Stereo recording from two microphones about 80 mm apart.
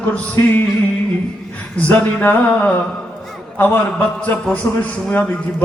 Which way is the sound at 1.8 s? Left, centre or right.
Left.